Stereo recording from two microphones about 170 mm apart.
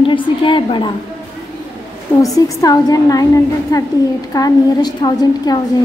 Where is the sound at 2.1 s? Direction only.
15° left (ahead or behind).